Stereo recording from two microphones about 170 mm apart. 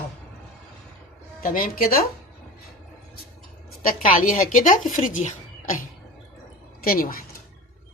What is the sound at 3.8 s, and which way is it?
Speech, 50° left (ahead or behind).